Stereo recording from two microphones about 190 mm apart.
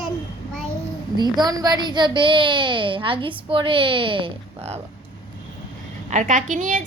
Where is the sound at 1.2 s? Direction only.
20° right (ahead or behind).